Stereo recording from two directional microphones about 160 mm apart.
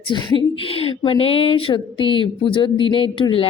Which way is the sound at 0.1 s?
30° left (ahead or behind).